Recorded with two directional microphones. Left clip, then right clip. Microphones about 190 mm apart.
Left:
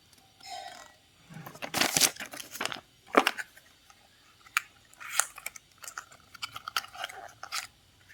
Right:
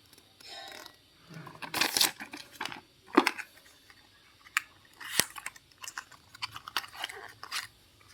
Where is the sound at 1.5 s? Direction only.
25° left (ahead or behind).